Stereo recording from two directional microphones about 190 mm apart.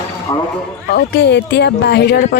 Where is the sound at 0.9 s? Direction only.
65° left (ahead or behind).